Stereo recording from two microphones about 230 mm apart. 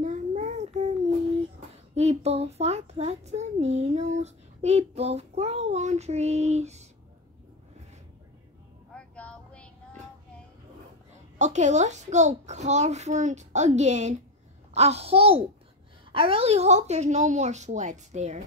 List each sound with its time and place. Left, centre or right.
0.0 s child singing: right
2.0 s a child's voice: right
8.9 s vehicle: centre
11.3 s a child's voice: right